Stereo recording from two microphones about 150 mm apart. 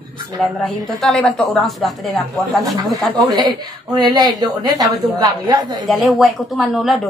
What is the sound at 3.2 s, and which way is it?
Speech, 25° right (ahead or behind).